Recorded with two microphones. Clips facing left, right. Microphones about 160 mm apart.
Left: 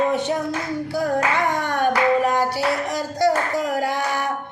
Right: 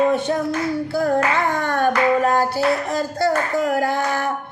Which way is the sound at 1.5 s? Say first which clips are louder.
Right 2 dB; 15° left (ahead or behind).